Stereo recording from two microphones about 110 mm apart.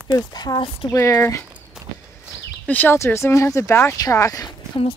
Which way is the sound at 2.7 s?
20° left (ahead or behind).